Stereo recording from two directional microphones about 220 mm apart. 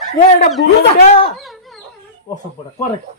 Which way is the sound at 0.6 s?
45° left (ahead or behind).